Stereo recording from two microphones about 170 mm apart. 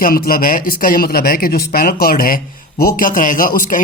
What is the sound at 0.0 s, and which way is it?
A man's voice, 60° left (ahead or behind).